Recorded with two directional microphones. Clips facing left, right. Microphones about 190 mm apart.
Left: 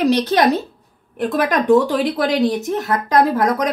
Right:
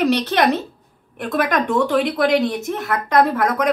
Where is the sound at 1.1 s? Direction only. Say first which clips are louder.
Left 2 dB; 35° left (ahead or behind).